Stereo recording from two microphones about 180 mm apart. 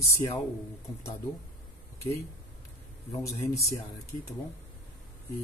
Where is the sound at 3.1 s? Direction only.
15° left (ahead or behind).